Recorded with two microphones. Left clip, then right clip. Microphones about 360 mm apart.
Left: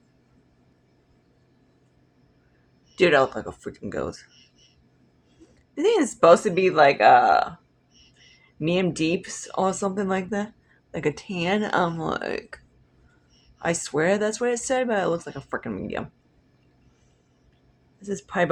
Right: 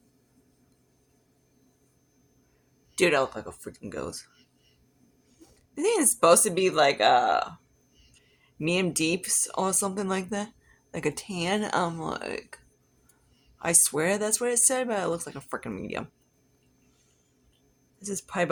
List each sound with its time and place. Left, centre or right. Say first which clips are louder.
2.9 s speech: left 5 dB; right
5.7 s speech: left 4 dB; right
8.5 s speech: left 3 dB; right
13.6 s speech: left 2 dB; right
18.0 s speech: left 4 dB; right